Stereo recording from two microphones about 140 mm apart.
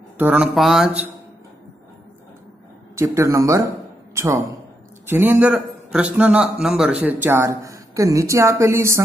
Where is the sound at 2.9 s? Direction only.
20° right (ahead or behind).